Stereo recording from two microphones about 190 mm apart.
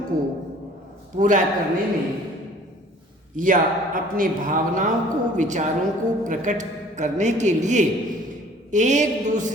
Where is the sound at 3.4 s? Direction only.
45° right (ahead or behind).